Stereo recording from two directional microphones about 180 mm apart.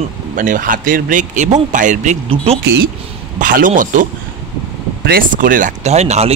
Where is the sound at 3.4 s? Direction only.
50° right (ahead or behind).